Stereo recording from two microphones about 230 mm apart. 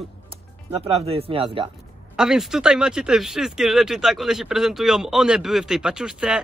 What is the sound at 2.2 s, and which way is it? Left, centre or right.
Speech, centre.